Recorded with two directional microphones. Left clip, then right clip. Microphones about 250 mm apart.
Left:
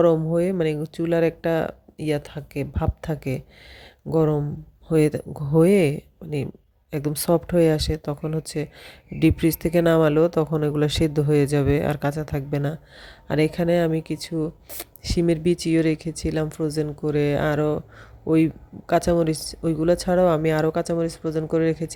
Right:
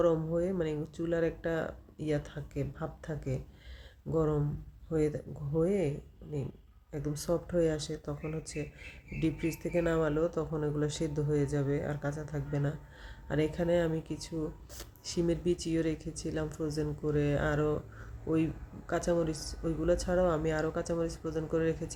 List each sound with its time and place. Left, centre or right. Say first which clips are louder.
0.0 s speech: left 10 dB; left
18.9 s speech: left 11 dB; left